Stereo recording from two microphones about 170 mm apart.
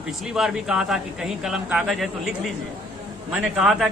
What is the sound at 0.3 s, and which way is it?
Speech, 5° right (ahead or behind).